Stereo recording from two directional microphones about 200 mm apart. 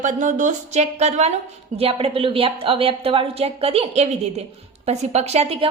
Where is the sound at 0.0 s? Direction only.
40° right (ahead or behind).